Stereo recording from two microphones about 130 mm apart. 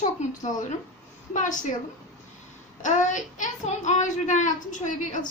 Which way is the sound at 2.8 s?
70° left (ahead or behind).